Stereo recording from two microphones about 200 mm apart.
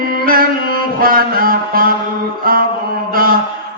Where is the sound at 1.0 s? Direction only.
45° right (ahead or behind).